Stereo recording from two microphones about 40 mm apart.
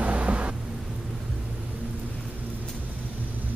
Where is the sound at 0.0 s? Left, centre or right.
Right.